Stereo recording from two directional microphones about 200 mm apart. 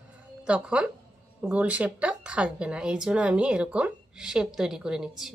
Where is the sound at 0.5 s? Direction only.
5° right (ahead or behind).